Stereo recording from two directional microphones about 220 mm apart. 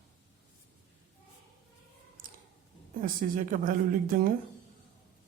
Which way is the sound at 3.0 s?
40° right (ahead or behind).